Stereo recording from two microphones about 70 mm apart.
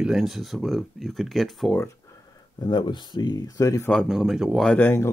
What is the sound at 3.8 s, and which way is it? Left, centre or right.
Speech, centre.